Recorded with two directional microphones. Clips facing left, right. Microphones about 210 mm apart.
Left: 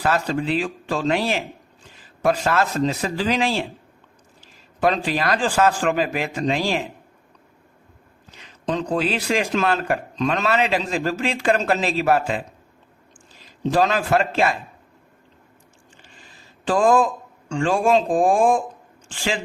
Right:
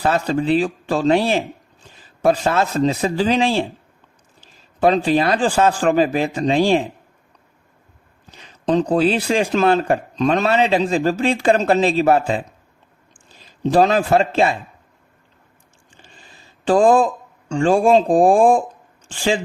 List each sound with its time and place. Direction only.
0.0 s a man's voice: 30° right (ahead or behind)
4.8 s a man's voice: 30° right (ahead or behind)
8.6 s a man's voice: 35° right (ahead or behind)
13.7 s a man's voice: 35° right (ahead or behind)
16.6 s a man's voice: 35° right (ahead or behind)